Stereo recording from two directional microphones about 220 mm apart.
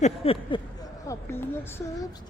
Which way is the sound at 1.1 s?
10° left (ahead or behind).